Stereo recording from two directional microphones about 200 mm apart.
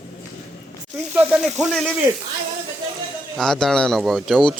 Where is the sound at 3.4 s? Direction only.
Centre (ahead or behind).